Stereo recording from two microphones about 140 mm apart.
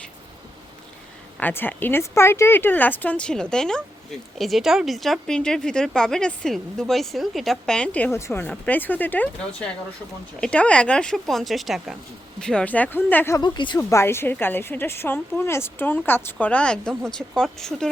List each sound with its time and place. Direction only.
1.4 s a woman's voice: 15° left (ahead or behind)
13.4 s speech: 35° left (ahead or behind)
13.9 s a woman's voice: 15° left (ahead or behind)